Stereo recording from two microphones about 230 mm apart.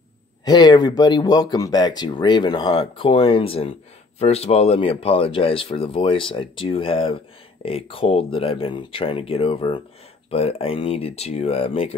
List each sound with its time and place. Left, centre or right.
0.5 s speech: centre